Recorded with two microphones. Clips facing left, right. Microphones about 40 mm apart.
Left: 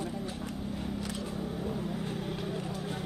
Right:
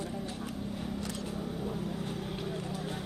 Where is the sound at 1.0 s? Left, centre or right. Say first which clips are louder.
Left 1 dB; left.